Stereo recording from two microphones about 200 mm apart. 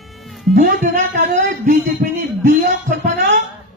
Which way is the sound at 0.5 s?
45° right (ahead or behind).